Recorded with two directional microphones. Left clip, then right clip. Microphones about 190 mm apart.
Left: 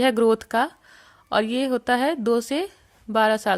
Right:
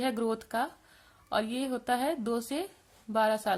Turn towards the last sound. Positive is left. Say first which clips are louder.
# left 8 dB
turn(degrees=40)  # may be behind; listen again after turning